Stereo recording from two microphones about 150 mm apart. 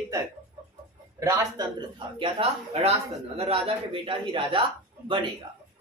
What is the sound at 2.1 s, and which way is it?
A man's voice, 35° right (ahead or behind).